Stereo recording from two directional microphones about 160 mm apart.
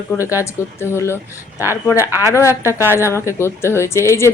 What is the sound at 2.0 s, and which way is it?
Speech, 15° right (ahead or behind).